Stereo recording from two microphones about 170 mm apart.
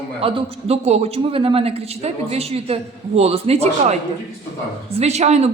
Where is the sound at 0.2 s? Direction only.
30° right (ahead or behind).